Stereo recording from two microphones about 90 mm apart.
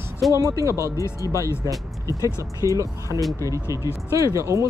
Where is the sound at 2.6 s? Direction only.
40° right (ahead or behind).